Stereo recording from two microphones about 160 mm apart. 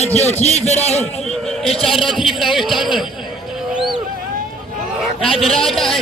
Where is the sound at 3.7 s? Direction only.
Centre (ahead or behind).